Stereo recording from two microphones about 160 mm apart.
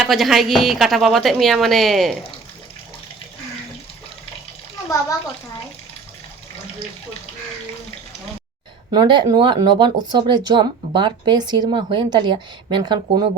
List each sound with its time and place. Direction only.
0.0 s a woman's voice: centre (ahead or behind)
8.9 s speech: 30° right (ahead or behind)